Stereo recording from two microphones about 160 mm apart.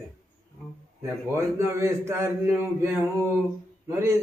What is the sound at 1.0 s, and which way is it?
A man's voice, 15° right (ahead or behind).